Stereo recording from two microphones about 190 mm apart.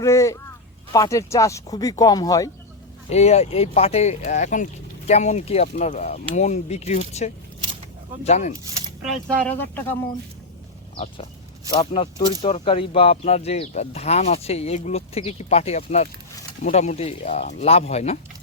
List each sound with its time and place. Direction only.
0.0 s speech: 15° left (ahead or behind)
3.1 s speech: 35° left (ahead or behind)
9.3 s speech: 10° left (ahead or behind)
10.9 s speech: 30° left (ahead or behind)